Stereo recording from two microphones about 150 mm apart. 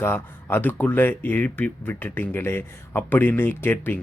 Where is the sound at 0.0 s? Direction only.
15° left (ahead or behind).